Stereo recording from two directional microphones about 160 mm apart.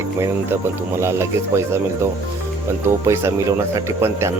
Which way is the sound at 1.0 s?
15° right (ahead or behind).